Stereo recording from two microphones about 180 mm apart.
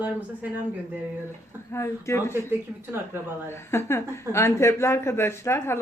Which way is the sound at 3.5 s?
15° left (ahead or behind).